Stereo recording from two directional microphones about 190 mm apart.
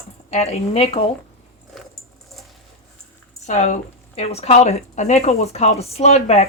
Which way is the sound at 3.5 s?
40° left (ahead or behind).